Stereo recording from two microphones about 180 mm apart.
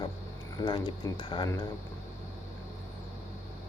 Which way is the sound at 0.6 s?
25° left (ahead or behind).